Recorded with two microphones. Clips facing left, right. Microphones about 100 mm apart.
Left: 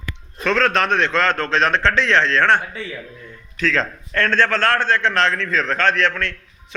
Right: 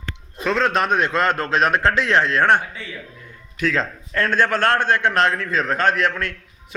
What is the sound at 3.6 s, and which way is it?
A man's voice, 10° right (ahead or behind).